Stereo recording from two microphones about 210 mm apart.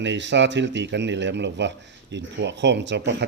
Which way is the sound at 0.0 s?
60° right (ahead or behind).